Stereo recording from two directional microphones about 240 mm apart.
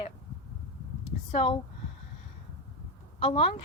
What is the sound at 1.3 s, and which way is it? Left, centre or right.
Speech, left.